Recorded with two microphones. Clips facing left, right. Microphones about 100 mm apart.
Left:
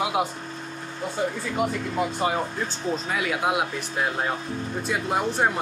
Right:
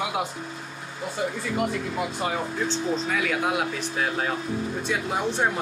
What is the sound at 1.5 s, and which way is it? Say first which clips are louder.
Speech: left 2 dB; 5° left (ahead or behind).